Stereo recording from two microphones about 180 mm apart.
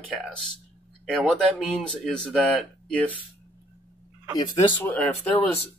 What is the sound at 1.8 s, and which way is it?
Speech, 5° left (ahead or behind).